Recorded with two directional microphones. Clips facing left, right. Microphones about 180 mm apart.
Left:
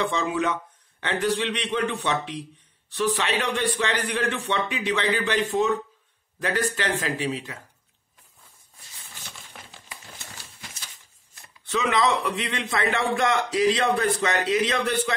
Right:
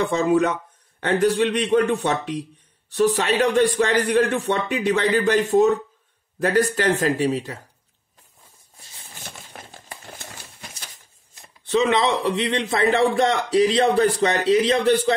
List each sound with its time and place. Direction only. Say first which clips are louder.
0.0 s a man's voice: right 6 dB; 45° right (ahead or behind)
9.1 s a sound: right 5 dB; 50° right (ahead or behind)
11.3 s a man's voice: right 8 dB; 30° right (ahead or behind)